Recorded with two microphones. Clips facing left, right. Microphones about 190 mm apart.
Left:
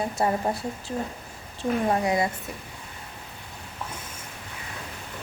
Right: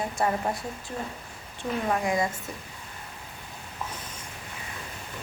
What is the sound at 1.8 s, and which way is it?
Speech, 30° left (ahead or behind).